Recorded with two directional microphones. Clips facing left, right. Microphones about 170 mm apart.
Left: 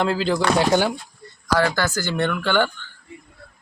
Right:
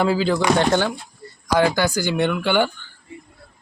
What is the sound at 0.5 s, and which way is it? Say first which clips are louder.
Speech: even; 10° left (ahead or behind).